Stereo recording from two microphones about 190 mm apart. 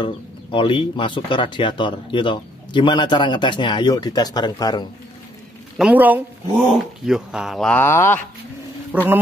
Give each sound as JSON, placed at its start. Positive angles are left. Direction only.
{"t": 0.0, "sound": "speech", "side_deg": 25}
{"t": 5.8, "sound": "speech", "side_deg": -10}
{"t": 8.9, "sound": "speech", "side_deg": -10}